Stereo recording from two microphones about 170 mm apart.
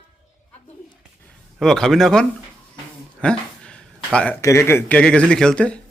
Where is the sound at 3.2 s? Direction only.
5° left (ahead or behind).